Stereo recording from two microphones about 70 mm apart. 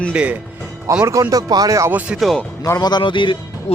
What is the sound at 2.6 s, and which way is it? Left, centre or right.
Speech, left.